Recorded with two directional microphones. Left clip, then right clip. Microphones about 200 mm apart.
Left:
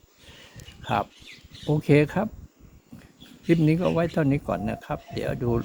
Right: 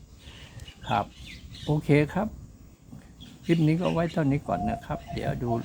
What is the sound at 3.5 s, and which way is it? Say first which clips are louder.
Speech: left 3 dB; 25° left (ahead or behind).